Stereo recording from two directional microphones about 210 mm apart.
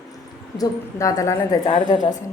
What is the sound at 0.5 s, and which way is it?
A woman's voice, 15° left (ahead or behind).